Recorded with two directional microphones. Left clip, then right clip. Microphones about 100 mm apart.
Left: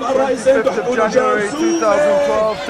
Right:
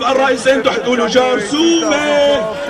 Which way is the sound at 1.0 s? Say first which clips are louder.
Right 1 dB; 25° left (ahead or behind).